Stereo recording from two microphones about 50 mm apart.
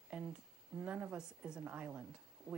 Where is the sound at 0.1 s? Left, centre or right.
Centre.